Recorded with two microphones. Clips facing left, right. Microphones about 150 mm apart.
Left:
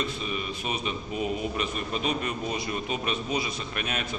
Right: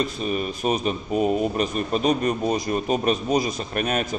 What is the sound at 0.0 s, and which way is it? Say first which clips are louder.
A man's voice: right 7 dB; 45° right (ahead or behind).